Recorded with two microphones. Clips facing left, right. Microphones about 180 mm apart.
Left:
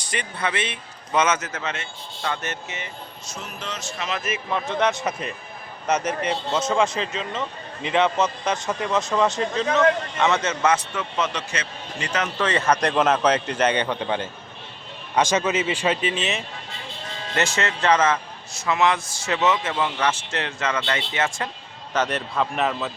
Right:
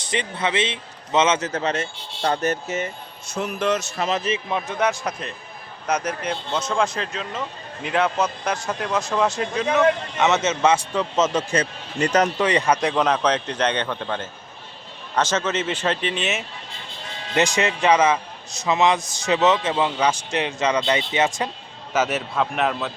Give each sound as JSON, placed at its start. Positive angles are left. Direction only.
{"t": 0.0, "sound": "a man's voice", "side_deg": -25}
{"t": 1.5, "sound": "speech", "side_deg": -35}
{"t": 3.3, "sound": "speech", "side_deg": -60}
{"t": 4.0, "sound": "speech", "side_deg": -35}
{"t": 4.4, "sound": "a man's voice", "side_deg": -15}
{"t": 4.8, "sound": "a man's voice", "side_deg": 0}
{"t": 11.2, "sound": "speech", "side_deg": -50}
{"t": 12.4, "sound": "a man's voice", "side_deg": -15}
{"t": 12.8, "sound": "a man's voice", "side_deg": 0}
{"t": 17.3, "sound": "a man's voice", "side_deg": -15}
{"t": 21.9, "sound": "a man's voice", "side_deg": -5}